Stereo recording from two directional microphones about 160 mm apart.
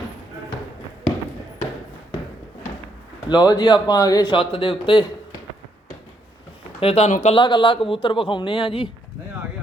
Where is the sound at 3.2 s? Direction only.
25° left (ahead or behind).